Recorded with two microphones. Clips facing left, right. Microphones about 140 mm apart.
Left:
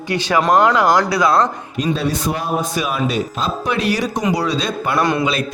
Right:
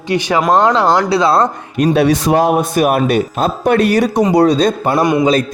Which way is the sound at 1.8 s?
75° right (ahead or behind).